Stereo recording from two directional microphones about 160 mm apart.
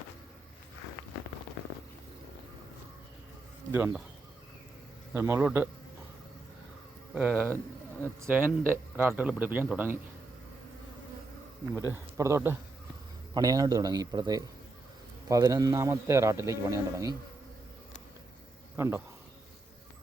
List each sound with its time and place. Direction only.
3.7 s a man's voice: 15° right (ahead or behind)
5.1 s a man's voice: 15° right (ahead or behind)
7.1 s speech: 10° right (ahead or behind)
7.3 s a man's voice: 15° left (ahead or behind)
8.2 s a man's voice: 10° right (ahead or behind)
12.1 s a man's voice: 20° right (ahead or behind)
18.8 s a man's voice: 15° right (ahead or behind)